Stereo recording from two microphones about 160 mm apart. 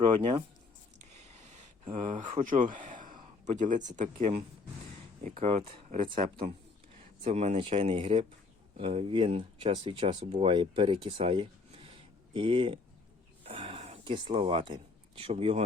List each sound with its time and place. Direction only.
0.0 s speech: 30° right (ahead or behind)
1.1 s a sound: 45° right (ahead or behind)
3.4 s speech: 50° right (ahead or behind)
7.3 s speech: 40° right (ahead or behind)
13.4 s rub: 35° right (ahead or behind)
15.2 s speech: 40° right (ahead or behind)